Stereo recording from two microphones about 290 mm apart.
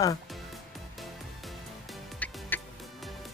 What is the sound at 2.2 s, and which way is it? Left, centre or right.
Music, centre.